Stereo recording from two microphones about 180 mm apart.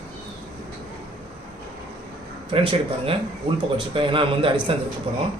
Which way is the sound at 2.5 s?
30° right (ahead or behind).